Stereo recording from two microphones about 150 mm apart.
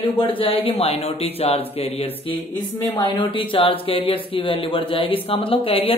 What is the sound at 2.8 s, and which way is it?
Speech, 25° left (ahead or behind).